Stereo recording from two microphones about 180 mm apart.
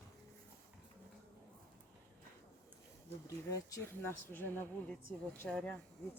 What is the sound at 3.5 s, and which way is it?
Speech, 20° left (ahead or behind).